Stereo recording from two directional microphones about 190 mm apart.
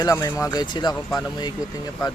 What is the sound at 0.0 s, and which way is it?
Speech, 20° left (ahead or behind).